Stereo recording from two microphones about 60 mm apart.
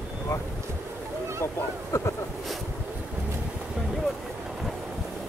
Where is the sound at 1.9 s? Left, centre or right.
Left.